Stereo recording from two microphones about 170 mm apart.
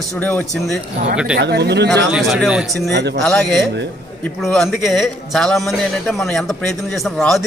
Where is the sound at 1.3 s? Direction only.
75° right (ahead or behind).